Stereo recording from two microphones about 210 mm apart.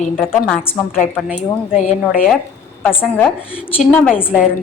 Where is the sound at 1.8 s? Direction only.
40° left (ahead or behind).